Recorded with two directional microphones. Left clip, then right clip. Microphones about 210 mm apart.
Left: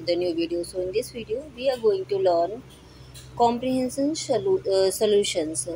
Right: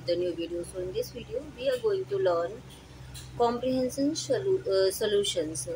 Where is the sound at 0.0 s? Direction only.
15° left (ahead or behind).